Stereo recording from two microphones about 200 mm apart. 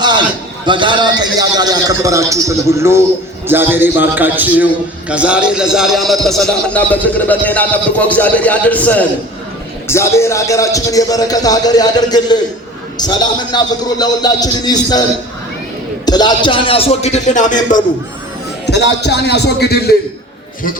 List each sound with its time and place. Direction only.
0.6 s a man's voice: 25° right (ahead or behind); by 15.0 s 20° left (ahead or behind)
16.0 s a man's voice: 20° left (ahead or behind); by 17.8 s 40° left (ahead or behind)
18.6 s a man's voice: 60° left (ahead or behind)